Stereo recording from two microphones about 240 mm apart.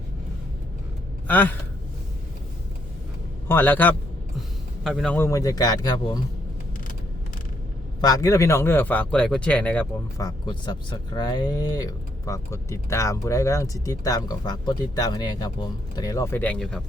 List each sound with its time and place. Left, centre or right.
1.3 s speech: centre
3.5 s speech: centre
8.0 s speech: centre